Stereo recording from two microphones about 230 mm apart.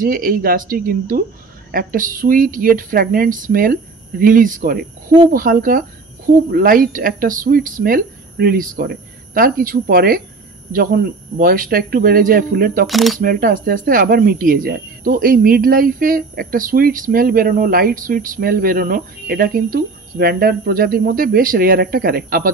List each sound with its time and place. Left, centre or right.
0.0 s speech: right
12.8 s speech: centre
13.2 s speech: right